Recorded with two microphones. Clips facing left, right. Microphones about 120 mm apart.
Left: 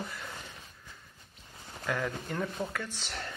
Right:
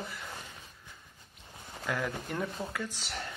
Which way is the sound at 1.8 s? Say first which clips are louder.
Left 1 dB; centre (ahead or behind).